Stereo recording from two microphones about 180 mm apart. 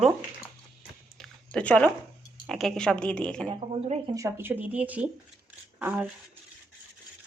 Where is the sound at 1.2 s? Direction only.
5° left (ahead or behind).